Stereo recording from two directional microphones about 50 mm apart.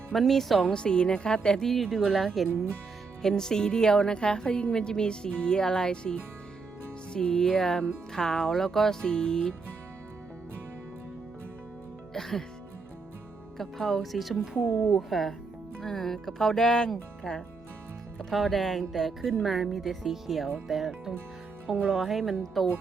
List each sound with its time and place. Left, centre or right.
0.1 s speech: centre
0.7 s a woman's voice: centre
1.7 s a woman's voice: centre
12.1 s speech: centre
13.6 s speech: centre
14.9 s a woman's voice: centre
18.2 s speech: centre